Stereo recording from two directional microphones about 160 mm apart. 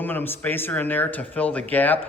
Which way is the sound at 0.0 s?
10° left (ahead or behind).